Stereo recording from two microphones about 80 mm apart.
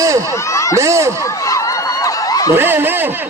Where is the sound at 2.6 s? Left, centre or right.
Right.